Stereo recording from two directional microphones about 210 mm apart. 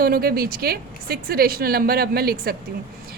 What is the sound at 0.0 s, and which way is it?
A woman's voice, 45° right (ahead or behind).